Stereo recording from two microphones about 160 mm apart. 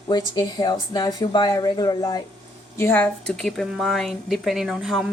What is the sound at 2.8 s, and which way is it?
Speech, 15° left (ahead or behind).